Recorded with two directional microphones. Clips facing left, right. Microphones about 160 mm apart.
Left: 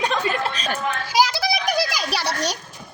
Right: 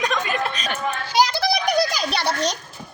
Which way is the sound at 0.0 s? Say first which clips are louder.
Left 1 dB; 30° left (ahead or behind).